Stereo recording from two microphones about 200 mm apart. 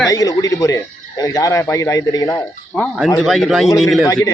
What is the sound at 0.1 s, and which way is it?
Speech, 15° left (ahead or behind).